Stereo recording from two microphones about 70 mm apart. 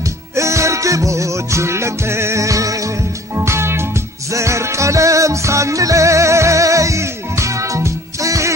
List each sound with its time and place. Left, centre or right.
0.4 s music: right
3.3 s music: right